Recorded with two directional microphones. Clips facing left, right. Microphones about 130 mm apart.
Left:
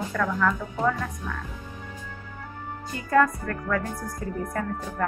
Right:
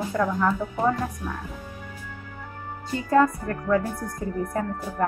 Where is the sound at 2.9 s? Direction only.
25° right (ahead or behind).